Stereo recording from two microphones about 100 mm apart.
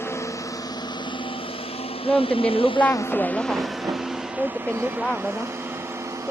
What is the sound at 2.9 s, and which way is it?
Speech, 30° left (ahead or behind).